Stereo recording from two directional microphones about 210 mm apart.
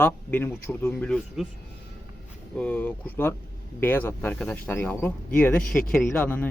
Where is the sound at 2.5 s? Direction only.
5° left (ahead or behind).